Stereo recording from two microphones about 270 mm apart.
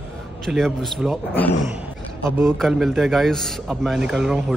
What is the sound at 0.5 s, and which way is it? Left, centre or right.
A man's voice, centre.